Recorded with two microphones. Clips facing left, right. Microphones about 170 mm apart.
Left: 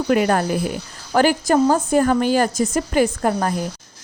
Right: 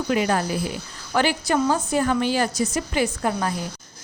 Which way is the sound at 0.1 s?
50° left (ahead or behind).